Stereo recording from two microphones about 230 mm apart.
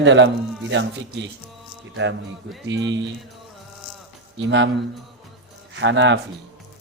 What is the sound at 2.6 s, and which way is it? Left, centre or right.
Speech, right.